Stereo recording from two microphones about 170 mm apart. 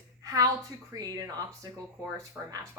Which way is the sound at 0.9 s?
20° right (ahead or behind).